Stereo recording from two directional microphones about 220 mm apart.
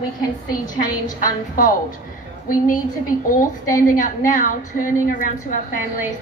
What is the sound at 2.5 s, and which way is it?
A woman's voice, 40° left (ahead or behind).